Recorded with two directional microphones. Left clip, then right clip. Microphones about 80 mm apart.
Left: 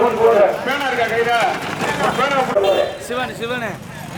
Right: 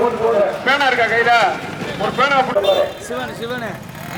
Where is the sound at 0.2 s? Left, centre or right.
Centre.